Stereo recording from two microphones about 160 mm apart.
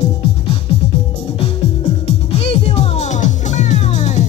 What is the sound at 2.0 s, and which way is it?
Music, 40° left (ahead or behind).